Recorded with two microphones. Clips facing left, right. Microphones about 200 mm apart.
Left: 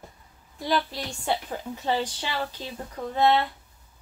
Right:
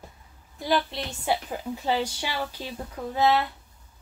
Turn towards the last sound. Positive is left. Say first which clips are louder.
# left 1 dB
turn(degrees=-5)  # may be behind; listen again after turning